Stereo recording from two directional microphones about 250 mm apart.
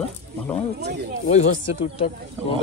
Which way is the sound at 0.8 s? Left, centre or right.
Right.